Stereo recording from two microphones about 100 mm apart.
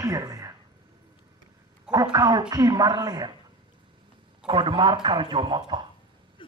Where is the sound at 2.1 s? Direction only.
45° right (ahead or behind).